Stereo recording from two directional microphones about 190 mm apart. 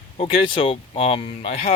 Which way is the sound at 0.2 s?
30° left (ahead or behind).